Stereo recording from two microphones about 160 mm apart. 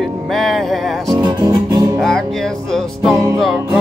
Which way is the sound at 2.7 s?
Centre (ahead or behind).